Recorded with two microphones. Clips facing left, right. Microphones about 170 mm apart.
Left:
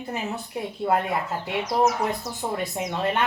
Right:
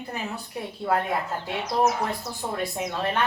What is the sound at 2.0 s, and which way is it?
Speech, 20° left (ahead or behind).